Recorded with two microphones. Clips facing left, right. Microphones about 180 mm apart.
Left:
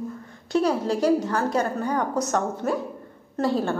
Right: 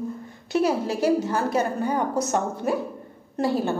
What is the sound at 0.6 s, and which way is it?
A woman's voice, 5° right (ahead or behind).